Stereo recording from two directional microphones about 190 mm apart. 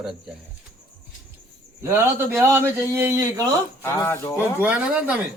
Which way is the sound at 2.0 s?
10° right (ahead or behind).